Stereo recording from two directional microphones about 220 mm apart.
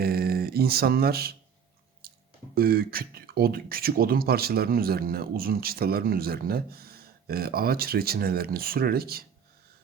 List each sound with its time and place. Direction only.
0.0 s mantra: 45° right (ahead or behind)
2.6 s speech: 45° right (ahead or behind)